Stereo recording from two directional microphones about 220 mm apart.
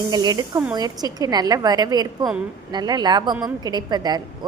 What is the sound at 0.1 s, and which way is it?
A woman's voice, 20° right (ahead or behind).